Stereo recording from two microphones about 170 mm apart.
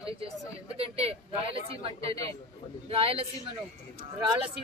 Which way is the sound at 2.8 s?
35° right (ahead or behind).